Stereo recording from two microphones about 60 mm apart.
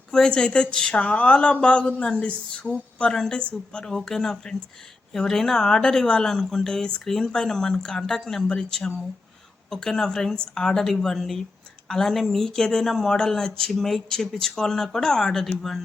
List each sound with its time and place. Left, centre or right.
0.1 s speech: centre